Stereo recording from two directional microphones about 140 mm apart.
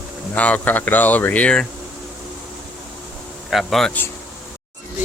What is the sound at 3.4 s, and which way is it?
Speech, centre (ahead or behind).